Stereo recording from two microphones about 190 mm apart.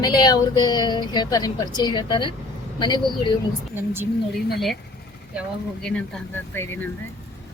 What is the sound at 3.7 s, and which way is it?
Speech, 15° right (ahead or behind).